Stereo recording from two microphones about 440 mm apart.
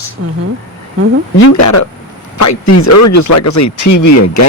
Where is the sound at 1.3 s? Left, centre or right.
Left.